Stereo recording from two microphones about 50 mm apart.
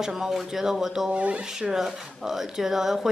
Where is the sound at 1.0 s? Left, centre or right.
Right.